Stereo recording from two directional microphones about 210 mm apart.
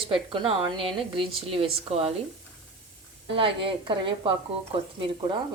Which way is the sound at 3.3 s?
25° right (ahead or behind).